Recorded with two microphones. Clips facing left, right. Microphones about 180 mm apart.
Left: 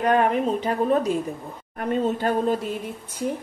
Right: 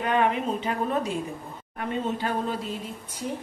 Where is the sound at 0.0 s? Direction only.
45° left (ahead or behind).